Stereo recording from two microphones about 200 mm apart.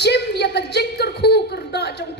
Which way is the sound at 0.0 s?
55° left (ahead or behind).